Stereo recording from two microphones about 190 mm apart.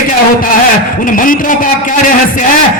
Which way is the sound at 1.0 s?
45° left (ahead or behind).